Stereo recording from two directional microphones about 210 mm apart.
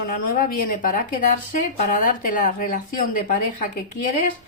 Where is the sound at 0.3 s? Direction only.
40° left (ahead or behind).